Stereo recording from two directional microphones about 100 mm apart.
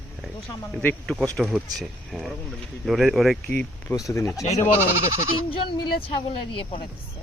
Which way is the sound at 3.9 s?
30° left (ahead or behind).